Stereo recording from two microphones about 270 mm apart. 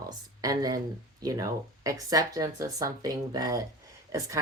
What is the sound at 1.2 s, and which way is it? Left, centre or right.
Speech, centre.